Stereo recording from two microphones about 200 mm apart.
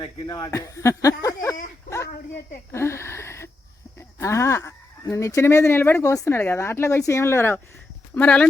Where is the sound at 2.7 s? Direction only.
15° left (ahead or behind).